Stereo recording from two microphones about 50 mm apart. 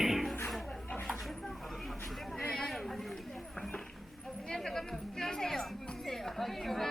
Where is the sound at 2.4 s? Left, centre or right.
Centre.